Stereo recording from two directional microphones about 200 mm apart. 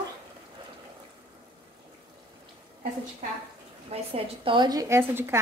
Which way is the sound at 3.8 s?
30° right (ahead or behind).